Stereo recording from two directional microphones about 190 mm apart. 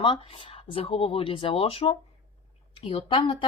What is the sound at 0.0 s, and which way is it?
Speech, 25° left (ahead or behind).